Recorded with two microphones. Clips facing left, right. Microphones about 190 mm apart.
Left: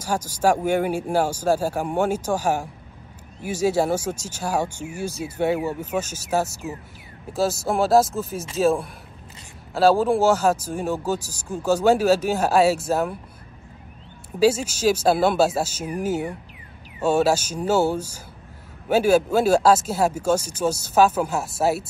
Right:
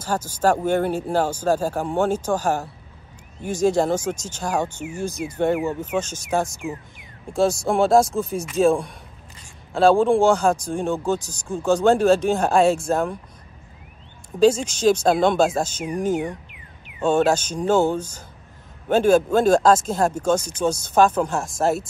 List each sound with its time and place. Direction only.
0.0 s speech: 10° left (ahead or behind)
14.4 s speech: 5° left (ahead or behind)